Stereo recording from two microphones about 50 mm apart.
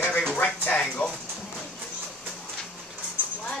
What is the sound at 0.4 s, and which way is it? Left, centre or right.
Music, left.